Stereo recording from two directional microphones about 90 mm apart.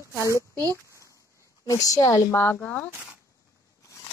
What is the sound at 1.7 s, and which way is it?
Speech, 40° left (ahead or behind).